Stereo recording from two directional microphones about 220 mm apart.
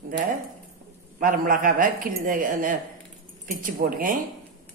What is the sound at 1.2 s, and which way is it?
Speech, 35° right (ahead or behind).